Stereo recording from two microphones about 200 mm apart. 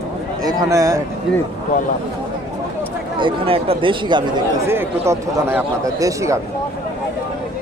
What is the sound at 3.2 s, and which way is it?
Speech, 25° right (ahead or behind).